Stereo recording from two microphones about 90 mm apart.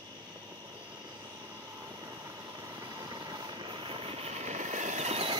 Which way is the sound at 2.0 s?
35° right (ahead or behind).